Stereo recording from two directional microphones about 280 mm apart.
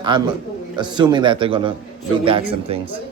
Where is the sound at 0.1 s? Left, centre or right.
Centre.